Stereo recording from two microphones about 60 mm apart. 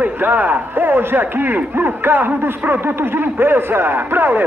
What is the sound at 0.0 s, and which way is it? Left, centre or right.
Speech, right.